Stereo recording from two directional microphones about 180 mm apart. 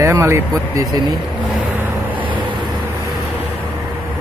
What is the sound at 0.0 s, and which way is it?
Speech, 15° right (ahead or behind).